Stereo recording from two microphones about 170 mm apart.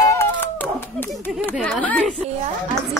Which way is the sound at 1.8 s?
10° left (ahead or behind).